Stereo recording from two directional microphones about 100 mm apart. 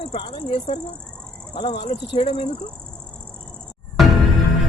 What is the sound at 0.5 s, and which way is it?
Speech, 70° left (ahead or behind).